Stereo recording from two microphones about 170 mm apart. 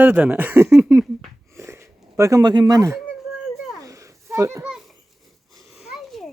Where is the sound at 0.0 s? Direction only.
10° right (ahead or behind).